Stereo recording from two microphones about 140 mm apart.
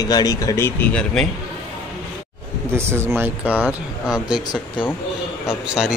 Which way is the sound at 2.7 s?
15° right (ahead or behind).